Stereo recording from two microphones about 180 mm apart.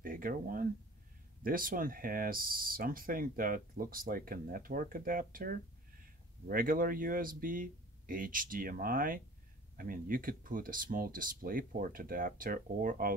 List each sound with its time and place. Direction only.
0.0 s speech: 50° right (ahead or behind)